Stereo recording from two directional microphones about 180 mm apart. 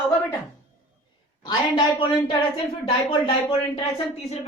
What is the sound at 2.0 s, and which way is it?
Speech, 30° left (ahead or behind).